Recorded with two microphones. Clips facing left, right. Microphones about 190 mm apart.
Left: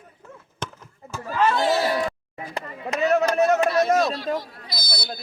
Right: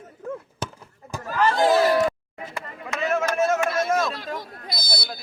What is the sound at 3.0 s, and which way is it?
Speech, 35° left (ahead or behind).